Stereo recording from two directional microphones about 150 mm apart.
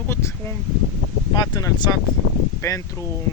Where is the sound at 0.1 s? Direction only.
15° left (ahead or behind).